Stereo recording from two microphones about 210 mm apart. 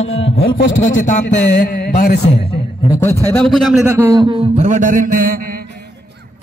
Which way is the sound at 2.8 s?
15° left (ahead or behind).